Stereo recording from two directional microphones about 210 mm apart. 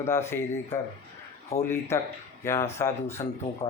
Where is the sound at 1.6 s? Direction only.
10° left (ahead or behind).